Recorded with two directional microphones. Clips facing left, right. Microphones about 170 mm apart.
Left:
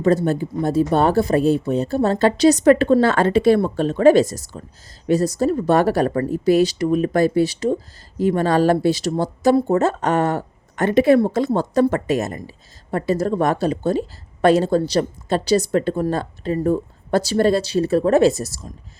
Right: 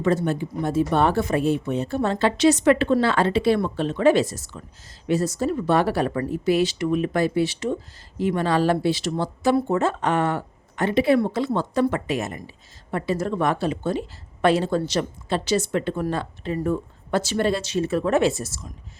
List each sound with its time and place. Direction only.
0.0 s a woman's voice: 40° left (ahead or behind)